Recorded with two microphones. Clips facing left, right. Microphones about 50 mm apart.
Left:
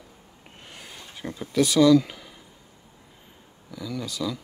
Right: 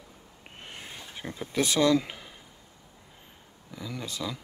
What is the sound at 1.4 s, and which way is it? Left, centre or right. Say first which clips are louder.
Speech: left 6 dB; right.